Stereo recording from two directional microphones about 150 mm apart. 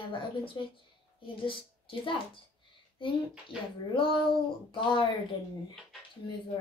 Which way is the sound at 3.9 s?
35° left (ahead or behind).